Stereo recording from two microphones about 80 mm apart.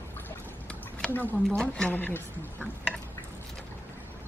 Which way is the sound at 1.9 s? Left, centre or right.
Left.